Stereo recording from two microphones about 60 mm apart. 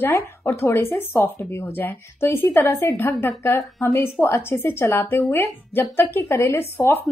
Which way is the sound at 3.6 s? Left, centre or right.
Left.